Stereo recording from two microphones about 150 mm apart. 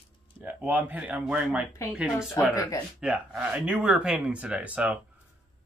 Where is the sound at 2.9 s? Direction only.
5° right (ahead or behind).